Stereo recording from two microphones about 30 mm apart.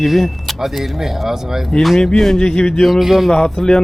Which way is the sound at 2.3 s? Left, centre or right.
Left.